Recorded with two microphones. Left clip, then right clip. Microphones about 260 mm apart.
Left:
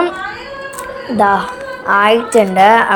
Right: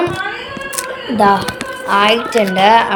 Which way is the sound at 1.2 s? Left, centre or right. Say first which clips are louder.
Even; centre.